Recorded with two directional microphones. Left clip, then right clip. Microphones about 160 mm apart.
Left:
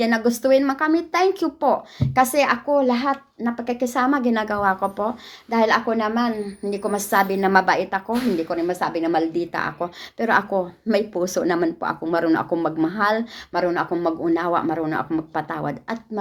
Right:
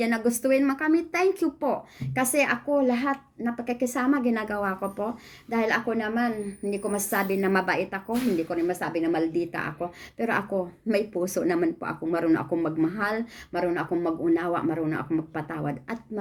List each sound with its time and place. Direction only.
0.0 s speech: 20° right (ahead or behind)